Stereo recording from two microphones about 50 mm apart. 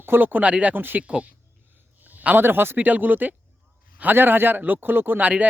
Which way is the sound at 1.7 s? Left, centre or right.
Right.